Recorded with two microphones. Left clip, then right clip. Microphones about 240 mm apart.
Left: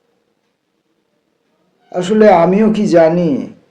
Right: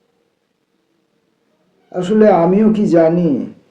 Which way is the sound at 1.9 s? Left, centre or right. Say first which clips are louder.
Left 2 dB; left.